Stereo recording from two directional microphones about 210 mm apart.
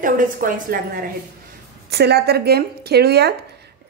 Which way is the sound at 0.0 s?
40° right (ahead or behind).